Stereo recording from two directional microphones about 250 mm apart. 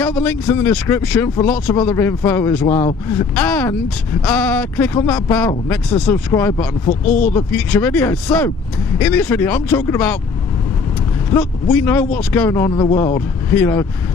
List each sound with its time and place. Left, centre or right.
0.0 s a man's voice: centre
6.9 s speech: left
7.3 s a man's voice: centre
11.7 s a man's voice: centre